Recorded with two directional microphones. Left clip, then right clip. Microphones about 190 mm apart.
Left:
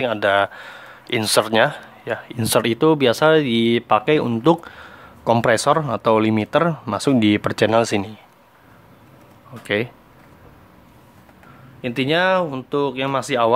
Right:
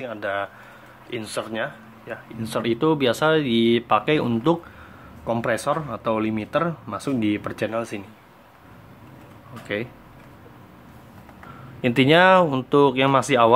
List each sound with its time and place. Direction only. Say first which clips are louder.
0.0 s speech: left 10 dB; 45° left (ahead or behind); by 4.6 s 30° left (ahead or behind)
5.2 s speech: left 7 dB; 45° left (ahead or behind)
9.5 s speech: left 7 dB; 40° left (ahead or behind)
11.8 s speech: right 3 dB; 5° right (ahead or behind)